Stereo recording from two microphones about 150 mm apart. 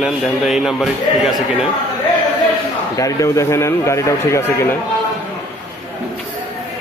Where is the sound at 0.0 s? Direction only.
5° right (ahead or behind).